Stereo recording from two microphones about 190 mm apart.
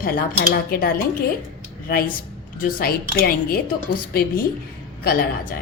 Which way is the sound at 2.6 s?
50° left (ahead or behind).